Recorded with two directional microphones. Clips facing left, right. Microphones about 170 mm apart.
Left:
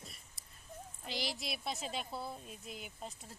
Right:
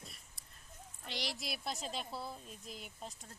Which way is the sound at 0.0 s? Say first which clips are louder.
Left 1 dB; centre (ahead or behind).